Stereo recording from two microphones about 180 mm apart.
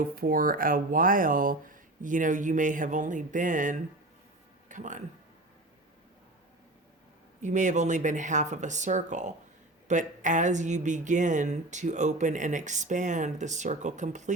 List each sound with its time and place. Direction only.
0.0 s speech: 50° right (ahead or behind)
7.4 s speech: 40° right (ahead or behind)